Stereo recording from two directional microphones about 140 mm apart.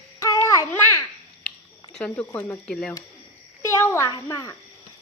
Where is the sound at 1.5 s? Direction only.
5° left (ahead or behind).